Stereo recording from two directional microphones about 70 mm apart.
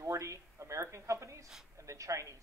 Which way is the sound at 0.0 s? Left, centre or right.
Right.